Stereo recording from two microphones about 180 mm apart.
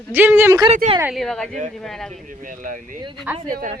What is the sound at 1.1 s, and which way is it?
Speech, centre (ahead or behind).